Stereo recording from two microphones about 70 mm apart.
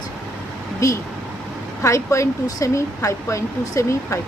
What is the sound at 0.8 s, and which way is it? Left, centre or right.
Speech, left.